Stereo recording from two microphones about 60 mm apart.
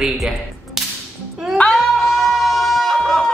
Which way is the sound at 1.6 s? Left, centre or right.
Left.